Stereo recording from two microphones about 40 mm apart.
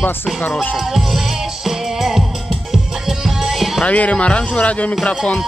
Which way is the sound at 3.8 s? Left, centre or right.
Left.